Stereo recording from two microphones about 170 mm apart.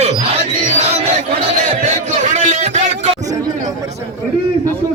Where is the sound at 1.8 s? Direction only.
40° right (ahead or behind).